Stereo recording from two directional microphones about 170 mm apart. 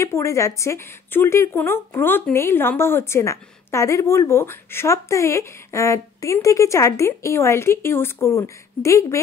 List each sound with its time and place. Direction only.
0.0 s a woman's voice: 15° left (ahead or behind)